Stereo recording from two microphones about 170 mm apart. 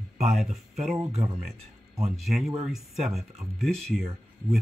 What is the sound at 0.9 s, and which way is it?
Speech, 35° right (ahead or behind).